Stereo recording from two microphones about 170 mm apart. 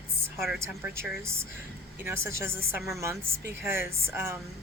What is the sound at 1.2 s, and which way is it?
A woman's voice, 15° right (ahead or behind).